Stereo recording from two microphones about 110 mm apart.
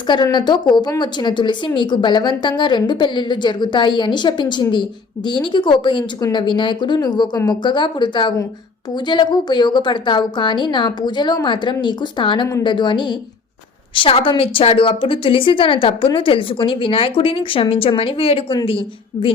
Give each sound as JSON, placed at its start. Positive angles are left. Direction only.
{"t": 0.1, "sound": "a woman's voice", "side_deg": 40}